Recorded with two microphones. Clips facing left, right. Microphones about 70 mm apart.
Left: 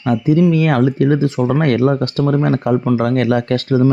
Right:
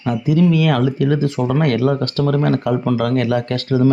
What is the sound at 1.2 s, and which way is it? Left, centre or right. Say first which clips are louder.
Speech: left 2 dB; centre.